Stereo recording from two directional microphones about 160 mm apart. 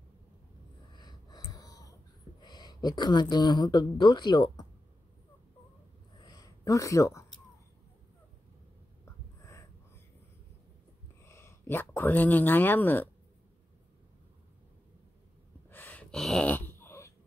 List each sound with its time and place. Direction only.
0.9 s wheeze: 25° left (ahead or behind)
2.4 s speech: 25° left (ahead or behind)
6.2 s a sound: 25° left (ahead or behind)
9.0 s a sound: 20° left (ahead or behind)
11.2 s speech: 15° left (ahead or behind)
15.7 s gasp: 10° left (ahead or behind)